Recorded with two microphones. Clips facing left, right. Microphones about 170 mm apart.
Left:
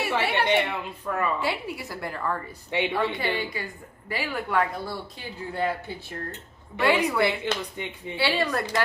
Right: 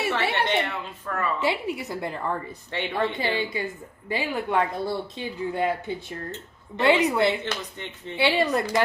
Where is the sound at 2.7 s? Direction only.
15° left (ahead or behind).